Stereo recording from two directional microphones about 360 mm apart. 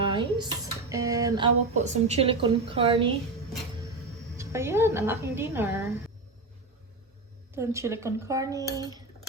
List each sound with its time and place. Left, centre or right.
0.0 s a woman's voice: centre
4.4 s a woman's voice: centre
7.5 s a woman's voice: centre